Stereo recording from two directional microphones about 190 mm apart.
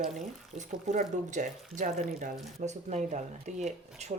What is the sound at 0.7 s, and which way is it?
Speech, 40° right (ahead or behind).